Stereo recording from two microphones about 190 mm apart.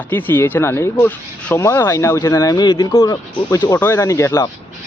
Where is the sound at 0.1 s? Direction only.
10° left (ahead or behind).